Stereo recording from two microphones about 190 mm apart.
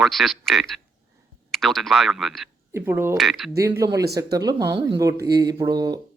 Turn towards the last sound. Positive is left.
turn(degrees=-20)  # may be behind; listen again after turning